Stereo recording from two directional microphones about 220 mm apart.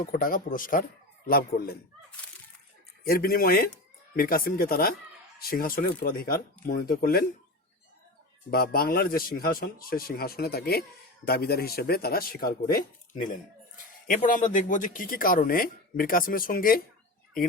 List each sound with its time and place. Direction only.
0.0 s a man's voice: 40° left (ahead or behind)
3.0 s a man's voice: 40° left (ahead or behind)
8.4 s a man's voice: 45° left (ahead or behind)